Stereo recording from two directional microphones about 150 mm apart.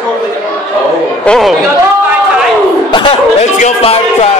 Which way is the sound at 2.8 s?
30° left (ahead or behind).